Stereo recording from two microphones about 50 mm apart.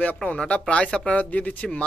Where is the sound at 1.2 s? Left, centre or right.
Left.